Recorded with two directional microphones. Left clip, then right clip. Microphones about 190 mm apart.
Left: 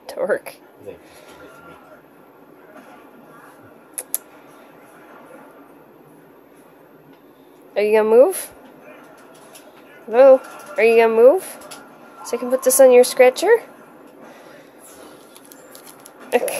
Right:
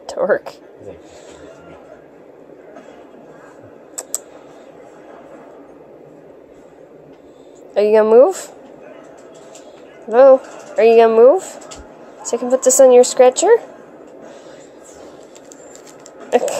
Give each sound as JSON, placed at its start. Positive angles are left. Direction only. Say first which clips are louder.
{"t": 0.0, "sound": "speech", "louder": "right 5 dB", "side_deg": 0}
{"t": 3.9, "sound": "computer keyboard", "louder": "right 6 dB", "side_deg": 0}
{"t": 7.7, "sound": "speech", "louder": "right 4 dB", "side_deg": 0}
{"t": 10.0, "sound": "speech", "louder": "right 2 dB", "side_deg": 0}